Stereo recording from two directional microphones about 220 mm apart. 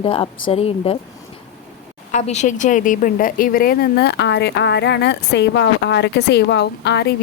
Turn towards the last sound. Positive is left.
turn(degrees=50)  # may be behind; listen again after turning